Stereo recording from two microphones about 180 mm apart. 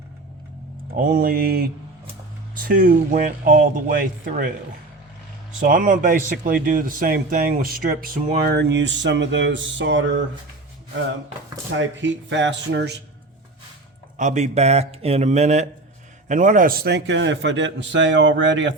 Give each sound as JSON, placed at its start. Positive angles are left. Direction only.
{"t": 0.9, "sound": "a sound", "side_deg": -55}
{"t": 2.6, "sound": "speech", "side_deg": -50}
{"t": 5.5, "sound": "speech", "side_deg": -50}
{"t": 11.7, "sound": "speech", "side_deg": -90}
{"t": 14.2, "sound": "speech", "side_deg": -40}